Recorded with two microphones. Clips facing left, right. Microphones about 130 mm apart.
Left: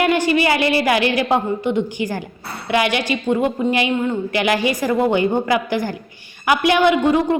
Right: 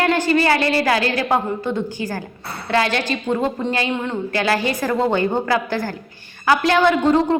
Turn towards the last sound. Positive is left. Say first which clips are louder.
# even
turn(degrees=15)  # may be behind; listen again after turning